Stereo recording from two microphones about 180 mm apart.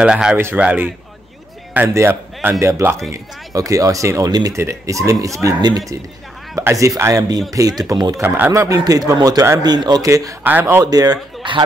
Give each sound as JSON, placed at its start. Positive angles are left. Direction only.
{"t": 0.0, "sound": "a man's voice", "side_deg": -5}